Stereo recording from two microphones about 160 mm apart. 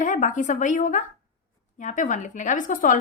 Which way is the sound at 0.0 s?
50° left (ahead or behind).